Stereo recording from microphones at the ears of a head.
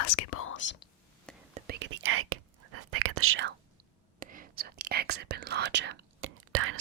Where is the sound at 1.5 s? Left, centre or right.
Right.